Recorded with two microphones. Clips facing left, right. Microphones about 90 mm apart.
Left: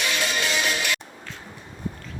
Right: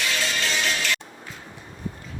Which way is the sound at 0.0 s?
15° left (ahead or behind).